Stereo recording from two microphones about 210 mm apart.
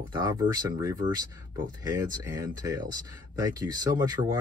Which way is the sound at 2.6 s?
20° right (ahead or behind).